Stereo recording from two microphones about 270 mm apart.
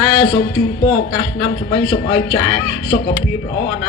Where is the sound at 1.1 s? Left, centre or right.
Left.